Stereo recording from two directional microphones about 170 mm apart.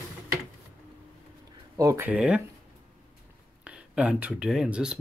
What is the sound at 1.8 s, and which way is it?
Speech, 20° right (ahead or behind).